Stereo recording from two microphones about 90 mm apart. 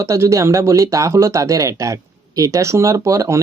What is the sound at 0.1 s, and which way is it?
Speech, 35° right (ahead or behind).